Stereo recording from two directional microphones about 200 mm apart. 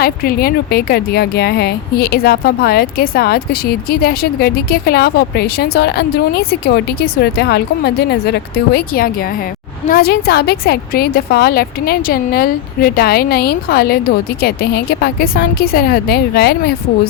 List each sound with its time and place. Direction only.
0.0 s speech: 50° left (ahead or behind)